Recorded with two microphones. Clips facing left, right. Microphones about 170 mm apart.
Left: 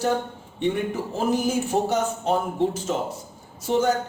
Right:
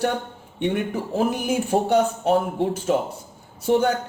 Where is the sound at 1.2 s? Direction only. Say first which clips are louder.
Even; 60° right (ahead or behind).